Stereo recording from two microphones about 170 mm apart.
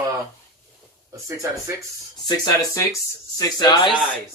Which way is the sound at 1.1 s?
20° right (ahead or behind).